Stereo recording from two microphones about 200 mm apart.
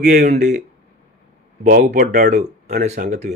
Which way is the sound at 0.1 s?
40° right (ahead or behind).